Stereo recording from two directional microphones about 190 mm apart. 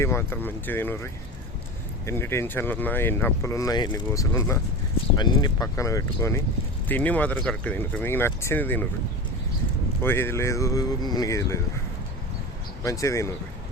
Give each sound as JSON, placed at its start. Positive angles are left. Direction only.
{"t": 0.0, "sound": "speech", "side_deg": 15}
{"t": 10.0, "sound": "speech", "side_deg": 10}
{"t": 12.8, "sound": "speech", "side_deg": 15}